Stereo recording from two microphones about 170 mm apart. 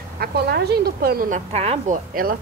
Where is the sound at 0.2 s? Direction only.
70° right (ahead or behind).